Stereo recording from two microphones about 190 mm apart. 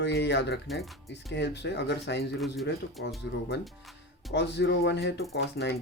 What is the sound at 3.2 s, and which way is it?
Speech, 65° left (ahead or behind).